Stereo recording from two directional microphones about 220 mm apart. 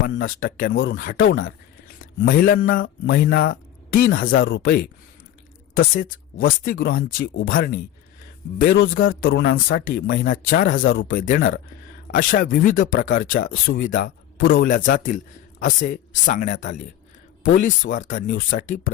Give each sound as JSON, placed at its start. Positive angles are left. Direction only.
{"t": 0.3, "sound": "speech", "side_deg": 40}
{"t": 0.7, "sound": "speech", "side_deg": 55}
{"t": 0.9, "sound": "speech", "side_deg": 40}
{"t": 1.2, "sound": "speech", "side_deg": 55}
{"t": 2.3, "sound": "speech", "side_deg": 40}
{"t": 2.8, "sound": "speech", "side_deg": 50}